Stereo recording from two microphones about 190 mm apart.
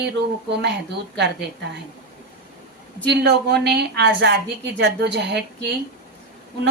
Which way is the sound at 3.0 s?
60° right (ahead or behind).